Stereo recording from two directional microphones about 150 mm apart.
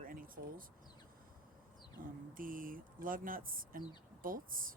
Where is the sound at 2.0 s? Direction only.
65° right (ahead or behind).